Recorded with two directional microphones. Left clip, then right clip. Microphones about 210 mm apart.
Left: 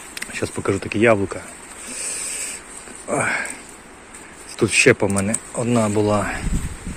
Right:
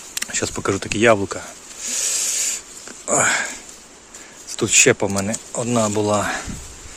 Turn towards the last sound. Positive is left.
turn(degrees=-15)  # may be behind; listen again after turning